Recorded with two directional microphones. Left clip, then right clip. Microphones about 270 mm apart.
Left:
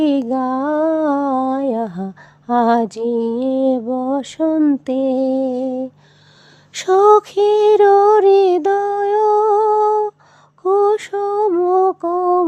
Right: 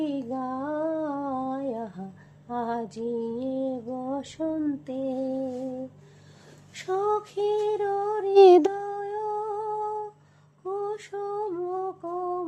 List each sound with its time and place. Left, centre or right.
0.0 s a sound: left
2.5 s mantra: left
6.7 s mantra: left
8.4 s music: centre
8.7 s a sound: left
10.6 s mantra: left